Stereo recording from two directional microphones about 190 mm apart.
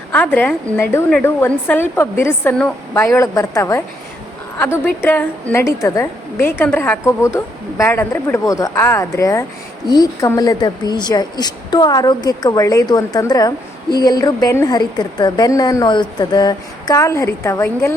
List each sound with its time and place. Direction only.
0.1 s a woman's voice: 10° left (ahead or behind)